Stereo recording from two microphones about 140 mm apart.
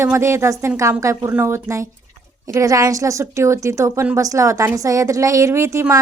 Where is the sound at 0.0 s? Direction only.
20° right (ahead or behind).